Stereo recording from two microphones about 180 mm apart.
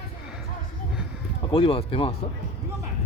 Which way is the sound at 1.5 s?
30° left (ahead or behind).